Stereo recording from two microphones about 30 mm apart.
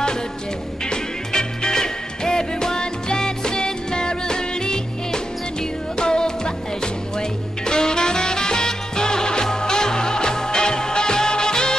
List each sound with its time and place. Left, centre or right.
0.8 s music: left